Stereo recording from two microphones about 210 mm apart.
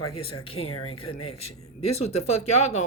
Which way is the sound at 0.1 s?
25° left (ahead or behind).